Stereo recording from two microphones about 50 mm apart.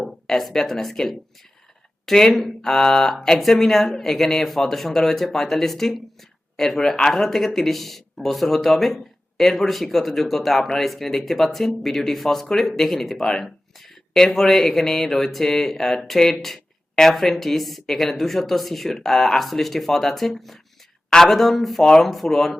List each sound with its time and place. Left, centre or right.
0.0 s speech: centre